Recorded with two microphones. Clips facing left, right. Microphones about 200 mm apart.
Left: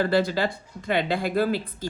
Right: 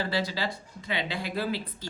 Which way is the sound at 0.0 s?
55° left (ahead or behind).